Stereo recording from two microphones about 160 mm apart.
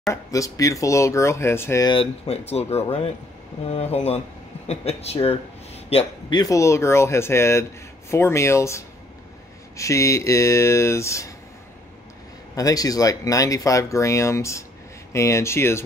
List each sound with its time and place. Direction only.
0.1 s speech: 20° left (ahead or behind)
1.9 s a man's voice: 35° left (ahead or behind)
6.4 s speech: 20° left (ahead or behind)
12.5 s speech: 20° left (ahead or behind)